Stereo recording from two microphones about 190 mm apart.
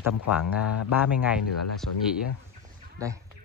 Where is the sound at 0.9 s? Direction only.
10° right (ahead or behind).